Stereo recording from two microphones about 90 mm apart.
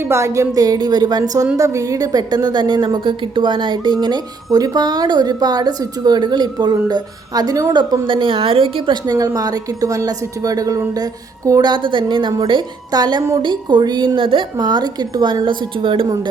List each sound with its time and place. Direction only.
0.0 s a woman's voice: 30° right (ahead or behind); by 7.9 s 55° right (ahead or behind)
8.0 s a woman's voice: 65° right (ahead or behind); by 9.0 s 90° right
9.0 s a woman's voice: 40° right (ahead or behind)
11.7 s a woman's voice: 60° right (ahead or behind)
14.2 s a woman's voice: 70° right (ahead or behind)
14.6 s a woman's voice: 50° right (ahead or behind); by 16.0 s 70° right (ahead or behind)